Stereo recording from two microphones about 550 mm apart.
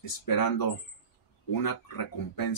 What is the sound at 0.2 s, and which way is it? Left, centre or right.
Speech, left.